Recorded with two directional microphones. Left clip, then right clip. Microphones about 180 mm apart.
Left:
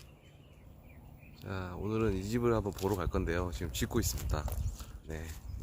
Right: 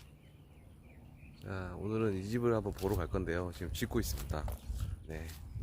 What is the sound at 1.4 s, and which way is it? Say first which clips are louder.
Speech: left 2 dB; 5° left (ahead or behind).